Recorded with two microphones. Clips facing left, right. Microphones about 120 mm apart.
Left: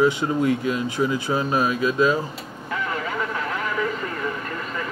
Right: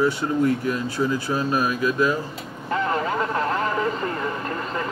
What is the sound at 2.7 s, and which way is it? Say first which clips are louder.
Vehicle: right 4 dB; 40° right (ahead or behind).